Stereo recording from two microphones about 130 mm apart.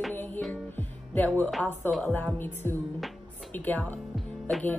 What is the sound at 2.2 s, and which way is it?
A woman's voice, 15° left (ahead or behind).